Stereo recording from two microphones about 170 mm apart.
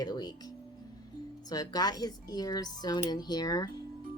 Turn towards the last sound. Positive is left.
turn(degrees=25)  # may be behind; listen again after turning